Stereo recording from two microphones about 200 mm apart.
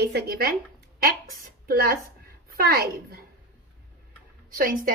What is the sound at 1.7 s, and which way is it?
A woman's voice, 50° right (ahead or behind).